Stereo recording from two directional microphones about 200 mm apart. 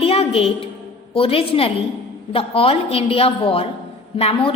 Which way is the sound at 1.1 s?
30° left (ahead or behind).